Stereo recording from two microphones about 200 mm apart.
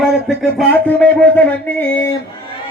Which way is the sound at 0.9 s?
5° left (ahead or behind).